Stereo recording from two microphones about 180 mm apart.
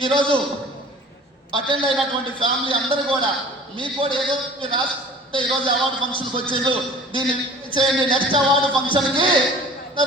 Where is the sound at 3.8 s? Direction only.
30° right (ahead or behind).